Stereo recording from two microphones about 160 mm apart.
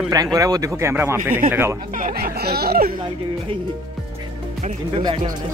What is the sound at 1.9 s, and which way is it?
Speech, 65° right (ahead or behind).